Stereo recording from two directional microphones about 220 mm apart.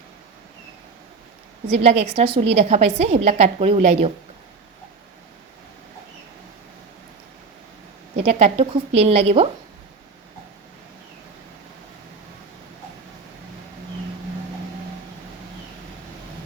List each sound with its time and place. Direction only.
1.7 s a woman's voice: 30° right (ahead or behind)
8.2 s a woman's voice: 30° right (ahead or behind)